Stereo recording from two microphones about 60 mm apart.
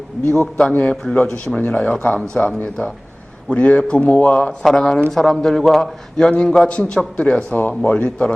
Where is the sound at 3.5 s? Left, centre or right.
Left.